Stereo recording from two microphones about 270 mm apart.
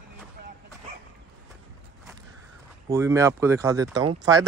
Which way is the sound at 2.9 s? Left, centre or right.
Centre.